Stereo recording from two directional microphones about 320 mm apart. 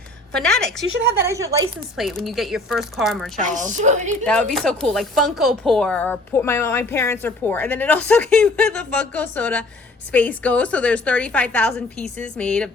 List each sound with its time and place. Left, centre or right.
0.3 s a woman's voice: centre
1.2 s a woman's voice: centre
3.4 s a woman's voice: right
4.3 s a woman's voice: centre